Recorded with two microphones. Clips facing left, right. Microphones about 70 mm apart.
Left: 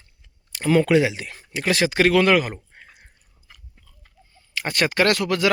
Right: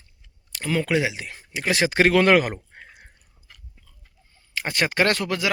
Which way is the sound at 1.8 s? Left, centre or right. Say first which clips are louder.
Even; right.